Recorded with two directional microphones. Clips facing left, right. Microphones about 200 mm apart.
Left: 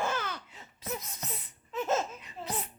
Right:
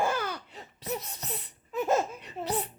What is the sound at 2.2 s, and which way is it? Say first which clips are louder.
Laughter: right 6 dB; 70° right (ahead or behind).